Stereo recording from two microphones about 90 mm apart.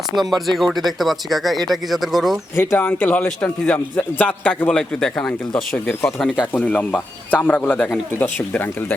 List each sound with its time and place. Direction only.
0.4 s speech: centre (ahead or behind)
2.6 s a man's voice: 25° left (ahead or behind); by 6.3 s 5° left (ahead or behind)
6.5 s a man's voice: 15° left (ahead or behind)